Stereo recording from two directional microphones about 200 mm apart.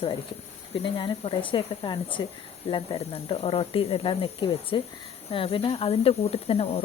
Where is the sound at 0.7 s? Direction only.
25° left (ahead or behind).